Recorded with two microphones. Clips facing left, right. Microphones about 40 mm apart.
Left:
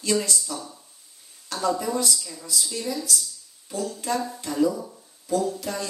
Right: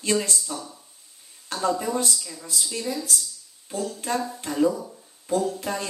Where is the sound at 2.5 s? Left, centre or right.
Right.